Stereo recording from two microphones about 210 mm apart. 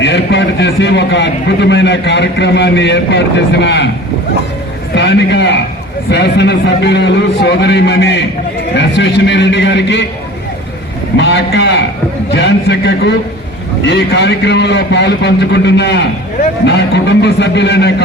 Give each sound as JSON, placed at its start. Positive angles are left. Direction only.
{"t": 0.0, "sound": "a man's voice", "side_deg": 60}
{"t": 4.9, "sound": "a man's voice", "side_deg": 55}
{"t": 11.2, "sound": "a man's voice", "side_deg": 60}